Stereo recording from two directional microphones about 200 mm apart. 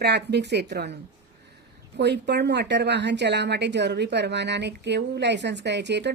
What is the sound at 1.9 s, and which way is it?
A woman's voice, 55° right (ahead or behind).